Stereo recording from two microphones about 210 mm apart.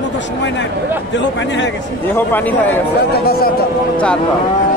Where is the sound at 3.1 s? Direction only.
45° left (ahead or behind).